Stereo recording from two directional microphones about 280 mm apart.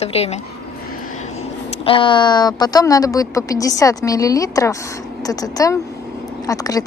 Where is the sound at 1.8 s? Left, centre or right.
Centre.